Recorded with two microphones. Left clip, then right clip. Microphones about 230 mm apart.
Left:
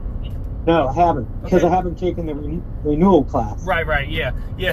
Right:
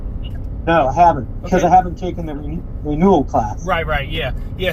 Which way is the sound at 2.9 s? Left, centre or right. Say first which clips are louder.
Right 1 dB; right.